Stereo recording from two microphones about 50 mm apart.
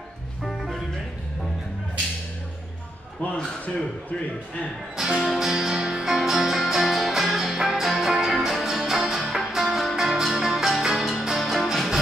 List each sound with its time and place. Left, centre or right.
0.4 s music: centre
3.2 s speech: left
4.9 s music: centre